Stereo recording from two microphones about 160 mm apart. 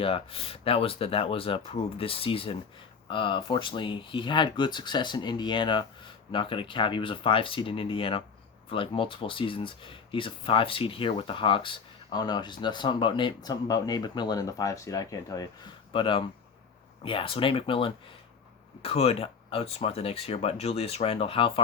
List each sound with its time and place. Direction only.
0.0 s speech: 35° left (ahead or behind)